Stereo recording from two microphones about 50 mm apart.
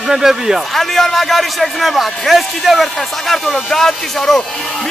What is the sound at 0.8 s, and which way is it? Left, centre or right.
A man's voice, centre.